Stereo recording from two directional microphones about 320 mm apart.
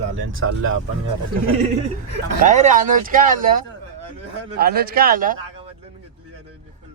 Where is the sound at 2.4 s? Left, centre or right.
Right.